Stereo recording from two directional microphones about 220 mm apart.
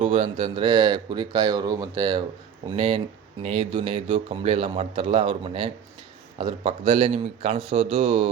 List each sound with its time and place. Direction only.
0.0 s a man's voice: 25° right (ahead or behind)